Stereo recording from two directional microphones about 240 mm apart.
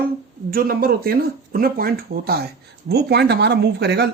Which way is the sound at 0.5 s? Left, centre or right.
Right.